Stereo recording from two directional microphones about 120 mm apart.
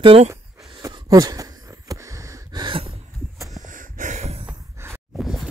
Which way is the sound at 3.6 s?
90° right.